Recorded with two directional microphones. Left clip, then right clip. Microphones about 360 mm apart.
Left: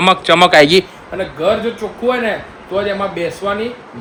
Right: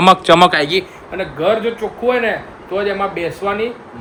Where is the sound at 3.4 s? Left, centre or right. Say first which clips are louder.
Even; centre.